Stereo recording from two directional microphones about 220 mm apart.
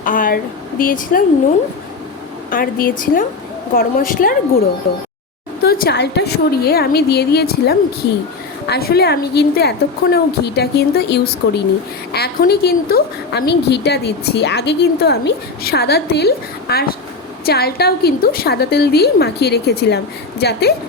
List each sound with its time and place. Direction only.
0.0 s a sound: 40° left (ahead or behind)
0.8 s a woman's voice: 40° left (ahead or behind)
2.5 s a woman's voice: 40° left (ahead or behind)
5.8 s a woman's voice: 50° left (ahead or behind)